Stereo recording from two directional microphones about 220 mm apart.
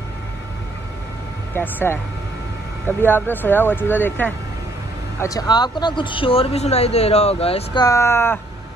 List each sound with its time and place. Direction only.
1.5 s speech: 10° left (ahead or behind)
3.0 s speech: 10° left (ahead or behind)